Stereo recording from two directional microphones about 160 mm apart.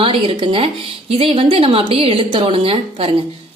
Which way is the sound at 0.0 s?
35° right (ahead or behind).